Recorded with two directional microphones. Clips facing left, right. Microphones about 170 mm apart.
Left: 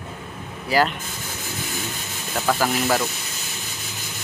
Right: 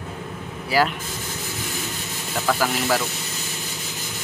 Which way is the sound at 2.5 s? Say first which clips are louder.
Left 1 dB; 10° left (ahead or behind).